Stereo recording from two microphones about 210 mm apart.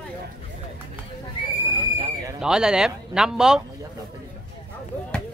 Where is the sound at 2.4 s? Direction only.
5° right (ahead or behind).